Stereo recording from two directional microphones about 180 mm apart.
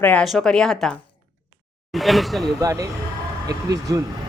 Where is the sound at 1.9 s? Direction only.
Centre (ahead or behind).